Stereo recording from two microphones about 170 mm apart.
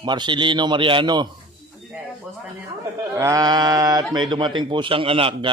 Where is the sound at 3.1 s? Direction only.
20° right (ahead or behind).